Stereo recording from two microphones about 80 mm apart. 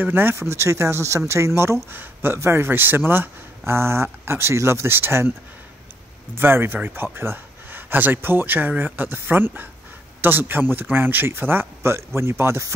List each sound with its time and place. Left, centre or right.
0.0 s speech: right
6.3 s speech: right